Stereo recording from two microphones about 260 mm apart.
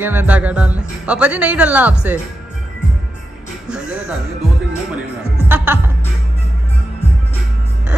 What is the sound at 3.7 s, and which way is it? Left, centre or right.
Music, centre.